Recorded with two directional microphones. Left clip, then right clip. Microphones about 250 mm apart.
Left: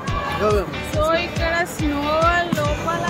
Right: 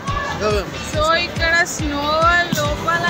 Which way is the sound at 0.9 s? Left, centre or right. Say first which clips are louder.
Right 3 dB; centre.